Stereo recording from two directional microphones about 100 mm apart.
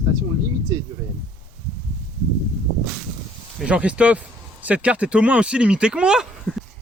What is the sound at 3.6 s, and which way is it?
Speech, 10° right (ahead or behind).